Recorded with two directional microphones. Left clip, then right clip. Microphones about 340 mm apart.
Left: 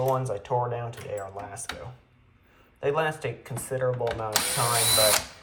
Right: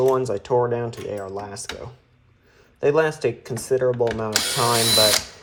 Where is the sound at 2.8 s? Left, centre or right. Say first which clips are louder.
Right 7 dB; right.